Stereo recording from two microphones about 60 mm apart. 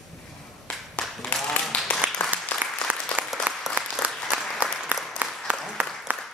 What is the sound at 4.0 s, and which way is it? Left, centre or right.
Applause, centre.